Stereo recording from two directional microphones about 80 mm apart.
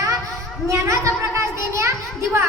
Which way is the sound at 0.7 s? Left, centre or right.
Right.